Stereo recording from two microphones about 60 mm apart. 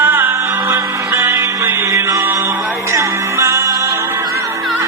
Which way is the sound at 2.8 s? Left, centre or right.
Right.